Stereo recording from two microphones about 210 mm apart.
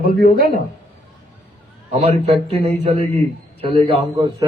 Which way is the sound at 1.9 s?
30° right (ahead or behind).